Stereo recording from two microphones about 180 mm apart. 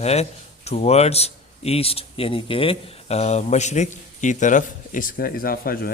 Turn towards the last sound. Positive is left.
turn(degrees=55)  # may be behind; listen again after turning